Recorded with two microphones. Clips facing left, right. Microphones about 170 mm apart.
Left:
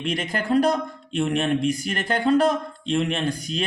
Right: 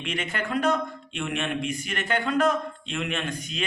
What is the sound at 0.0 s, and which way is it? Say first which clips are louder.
Speech: left 4 dB; 35° left (ahead or behind).